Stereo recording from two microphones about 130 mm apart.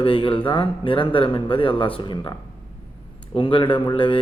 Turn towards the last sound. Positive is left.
turn(degrees=40)  # may be behind; listen again after turning